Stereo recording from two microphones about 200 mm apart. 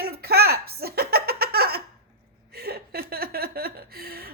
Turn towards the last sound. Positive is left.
turn(degrees=-50)  # may be behind; listen again after turning